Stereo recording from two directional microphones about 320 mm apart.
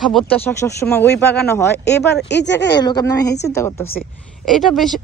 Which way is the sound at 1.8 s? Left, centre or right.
Left.